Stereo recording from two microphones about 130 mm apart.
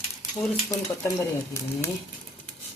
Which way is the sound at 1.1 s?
20° left (ahead or behind).